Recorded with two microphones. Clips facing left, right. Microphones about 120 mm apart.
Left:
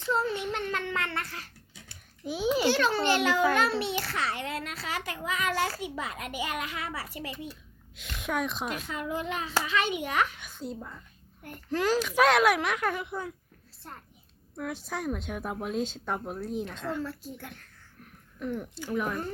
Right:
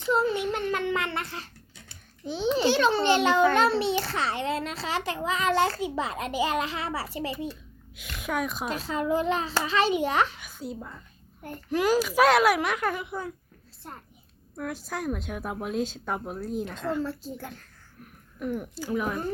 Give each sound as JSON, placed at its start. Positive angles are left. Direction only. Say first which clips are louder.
{"t": 0.0, "sound": "child singing", "louder": "right 4 dB", "side_deg": -10}
{"t": 2.2, "sound": "babbling", "louder": "right 1 dB", "side_deg": 5}
{"t": 2.6, "sound": "a child's voice", "louder": "right 5 dB", "side_deg": -20}
{"t": 7.9, "sound": "a woman's voice", "louder": "right 1 dB", "side_deg": -5}
{"t": 8.7, "sound": "a child's voice", "louder": "right 7 dB", "side_deg": -30}
{"t": 10.3, "sound": "a woman's voice", "louder": "right 1 dB", "side_deg": -5}
{"t": 13.8, "sound": "a child's voice", "louder": "right 3 dB", "side_deg": -15}
{"t": 14.5, "sound": "a woman's voice", "louder": "right 1 dB", "side_deg": -5}
{"t": 17.0, "sound": "a child's voice", "louder": "right 4 dB", "side_deg": -30}
{"t": 18.0, "sound": "a sound", "louder": "right 3 dB", "side_deg": -10}
{"t": 18.9, "sound": "a woman's voice", "louder": "right 2 dB", "side_deg": -5}